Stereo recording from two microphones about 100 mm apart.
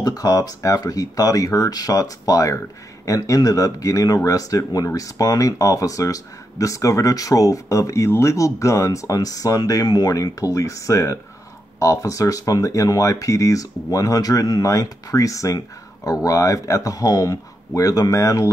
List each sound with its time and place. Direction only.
0.0 s speech: 40° left (ahead or behind)